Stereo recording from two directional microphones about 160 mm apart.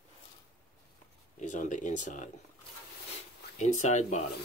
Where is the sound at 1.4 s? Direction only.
50° left (ahead or behind).